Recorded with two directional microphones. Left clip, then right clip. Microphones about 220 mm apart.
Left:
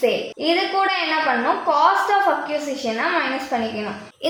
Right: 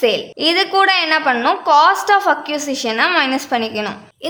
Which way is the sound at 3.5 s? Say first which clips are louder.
Right 4 dB; 40° right (ahead or behind).